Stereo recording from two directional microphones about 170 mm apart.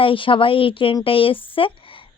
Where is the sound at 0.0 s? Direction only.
30° left (ahead or behind).